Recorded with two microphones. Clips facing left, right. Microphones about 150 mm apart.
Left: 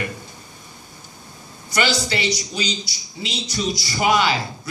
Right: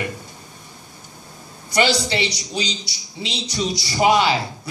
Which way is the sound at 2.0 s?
30° right (ahead or behind).